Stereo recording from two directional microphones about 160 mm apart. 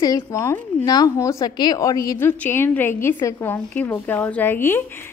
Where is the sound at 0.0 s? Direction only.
20° left (ahead or behind).